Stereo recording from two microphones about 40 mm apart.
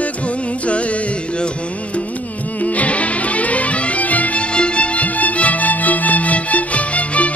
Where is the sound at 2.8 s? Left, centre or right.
Left.